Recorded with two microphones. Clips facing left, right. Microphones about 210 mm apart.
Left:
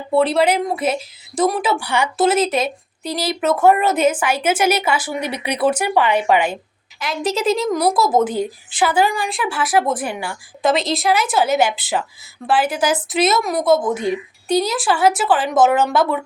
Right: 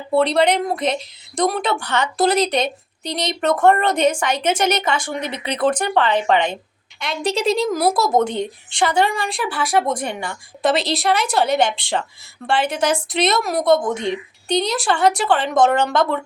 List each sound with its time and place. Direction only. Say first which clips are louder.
0.1 s a woman's voice: left 1 dB; centre (ahead or behind)